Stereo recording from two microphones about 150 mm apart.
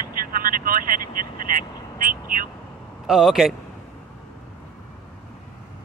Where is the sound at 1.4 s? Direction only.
70° right (ahead or behind).